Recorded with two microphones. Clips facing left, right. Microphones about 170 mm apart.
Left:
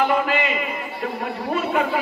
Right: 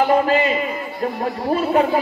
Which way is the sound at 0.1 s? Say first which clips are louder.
Right 5 dB; 35° right (ahead or behind).